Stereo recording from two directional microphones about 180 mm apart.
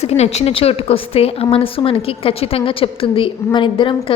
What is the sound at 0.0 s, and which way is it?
A woman's voice, 35° left (ahead or behind).